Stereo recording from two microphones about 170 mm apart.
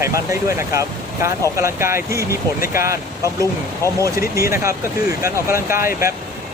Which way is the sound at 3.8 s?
15° left (ahead or behind).